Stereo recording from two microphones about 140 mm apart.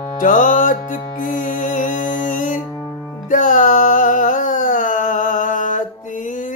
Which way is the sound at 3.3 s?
70° left (ahead or behind).